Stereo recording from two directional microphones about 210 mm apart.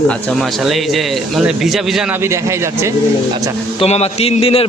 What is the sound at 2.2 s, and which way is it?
Speech, 15° right (ahead or behind).